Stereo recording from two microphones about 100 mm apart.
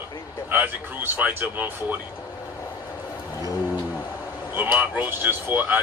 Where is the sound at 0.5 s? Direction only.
20° right (ahead or behind).